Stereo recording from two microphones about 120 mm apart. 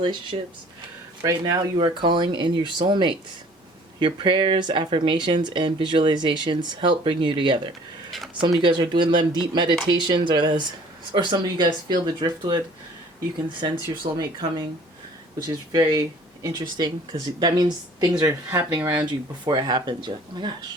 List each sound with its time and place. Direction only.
0.0 s speech: 40° right (ahead or behind)
1.2 s speech: 30° right (ahead or behind)
1.8 s speech: 45° right (ahead or behind)
13.6 s speech: 40° right (ahead or behind)
19.5 s speech: 40° right (ahead or behind)